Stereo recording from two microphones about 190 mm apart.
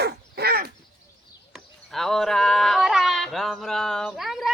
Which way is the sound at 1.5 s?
Centre (ahead or behind).